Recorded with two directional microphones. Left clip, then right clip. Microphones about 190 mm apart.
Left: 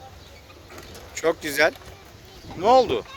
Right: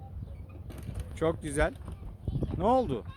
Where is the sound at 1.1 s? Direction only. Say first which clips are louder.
Left 7 dB; centre (ahead or behind).